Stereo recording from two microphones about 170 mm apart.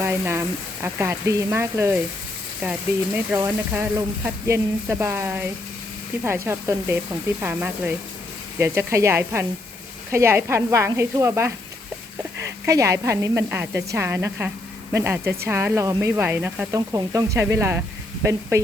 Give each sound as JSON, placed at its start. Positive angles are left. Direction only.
{"t": 0.0, "sound": "speech", "side_deg": -15}
{"t": 3.3, "sound": "speech", "side_deg": -15}
{"t": 12.6, "sound": "speech", "side_deg": -20}